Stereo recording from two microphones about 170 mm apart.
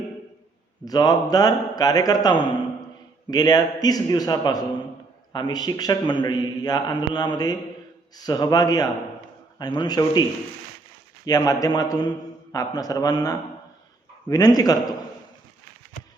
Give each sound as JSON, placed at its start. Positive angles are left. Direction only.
{"t": 0.9, "sound": "a man's voice", "side_deg": 20}
{"t": 11.3, "sound": "a man's voice", "side_deg": 20}